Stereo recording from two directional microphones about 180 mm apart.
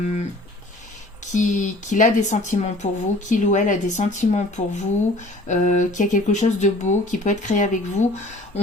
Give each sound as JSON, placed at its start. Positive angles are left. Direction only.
{"t": 1.2, "sound": "speech", "side_deg": 45}